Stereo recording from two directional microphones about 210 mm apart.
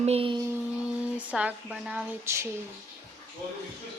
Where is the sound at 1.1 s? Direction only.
5° right (ahead or behind).